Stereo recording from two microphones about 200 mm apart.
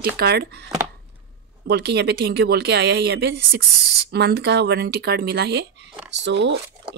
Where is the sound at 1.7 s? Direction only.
55° right (ahead or behind).